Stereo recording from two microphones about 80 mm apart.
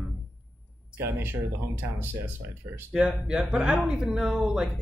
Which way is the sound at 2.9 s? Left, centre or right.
Centre.